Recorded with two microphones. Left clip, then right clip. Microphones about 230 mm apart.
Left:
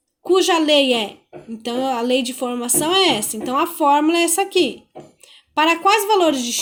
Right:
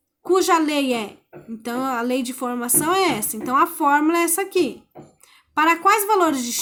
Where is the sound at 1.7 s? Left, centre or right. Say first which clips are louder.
Left 4 dB; centre.